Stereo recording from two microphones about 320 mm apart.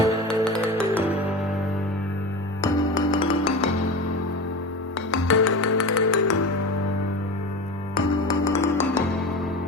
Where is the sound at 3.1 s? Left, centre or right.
Centre.